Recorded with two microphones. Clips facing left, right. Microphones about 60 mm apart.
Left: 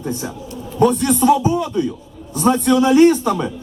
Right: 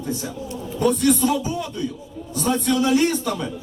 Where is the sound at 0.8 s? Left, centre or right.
Left.